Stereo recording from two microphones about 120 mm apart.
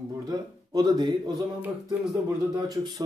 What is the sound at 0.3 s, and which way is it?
Speech, 35° right (ahead or behind).